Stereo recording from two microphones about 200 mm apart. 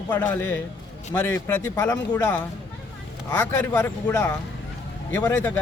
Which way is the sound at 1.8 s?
20° left (ahead or behind).